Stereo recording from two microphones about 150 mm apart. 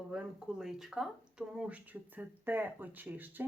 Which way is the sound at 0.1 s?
5° right (ahead or behind).